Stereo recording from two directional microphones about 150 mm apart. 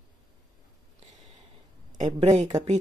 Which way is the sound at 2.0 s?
45° right (ahead or behind).